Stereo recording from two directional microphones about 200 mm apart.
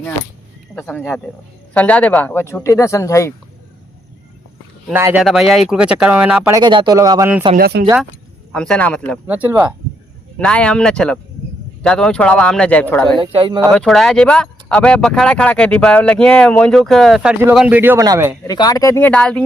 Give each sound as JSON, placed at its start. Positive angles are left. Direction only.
{"t": 0.8, "sound": "speech", "side_deg": 10}
{"t": 4.9, "sound": "speech", "side_deg": -10}
{"t": 6.5, "sound": "speech", "side_deg": -20}
{"t": 7.5, "sound": "speech", "side_deg": -50}
{"t": 8.5, "sound": "speech", "side_deg": 5}
{"t": 9.2, "sound": "speech", "side_deg": -10}
{"t": 10.3, "sound": "speech", "side_deg": 5}
{"t": 13.1, "sound": "speech", "side_deg": -25}
{"t": 13.6, "sound": "speech", "side_deg": 5}
{"t": 18.4, "sound": "speech", "side_deg": 20}